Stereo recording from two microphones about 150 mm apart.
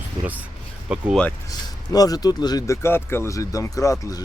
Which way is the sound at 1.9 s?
25° left (ahead or behind).